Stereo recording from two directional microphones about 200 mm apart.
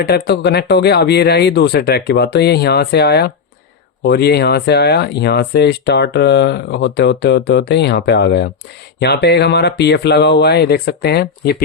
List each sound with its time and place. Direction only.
0.0 s speech: 55° left (ahead or behind)